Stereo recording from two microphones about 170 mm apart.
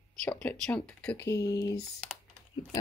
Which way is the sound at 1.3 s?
20° left (ahead or behind).